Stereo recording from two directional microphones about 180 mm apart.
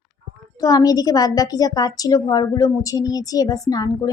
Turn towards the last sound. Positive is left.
turn(degrees=20)  # may be behind; listen again after turning